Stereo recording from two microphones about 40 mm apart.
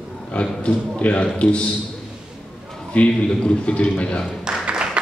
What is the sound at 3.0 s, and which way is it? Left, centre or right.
A man's voice, left.